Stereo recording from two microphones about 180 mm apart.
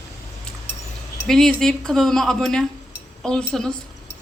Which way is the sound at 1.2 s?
5° left (ahead or behind).